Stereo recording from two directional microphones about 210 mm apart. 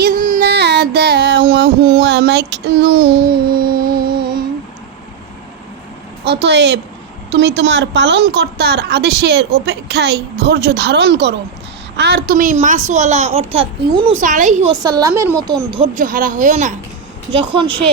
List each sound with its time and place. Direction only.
0.0 s music: 40° right (ahead or behind)
6.2 s a woman's voice: 55° right (ahead or behind); by 14.1 s 25° right (ahead or behind)
14.2 s a child's voice: 40° right (ahead or behind)
14.8 s a woman's voice: 15° right (ahead or behind)
16.0 s a child's voice: 40° right (ahead or behind)
17.3 s a woman's voice: 25° right (ahead or behind)